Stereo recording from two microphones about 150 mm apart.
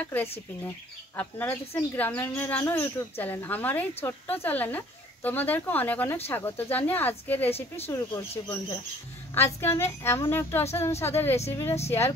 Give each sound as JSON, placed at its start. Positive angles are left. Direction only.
{"t": 0.0, "sound": "speech", "side_deg": 15}
{"t": 1.4, "sound": "speech", "side_deg": 15}